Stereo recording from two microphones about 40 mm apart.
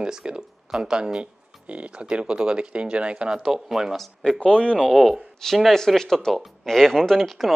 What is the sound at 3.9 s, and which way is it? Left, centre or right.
Speech, centre.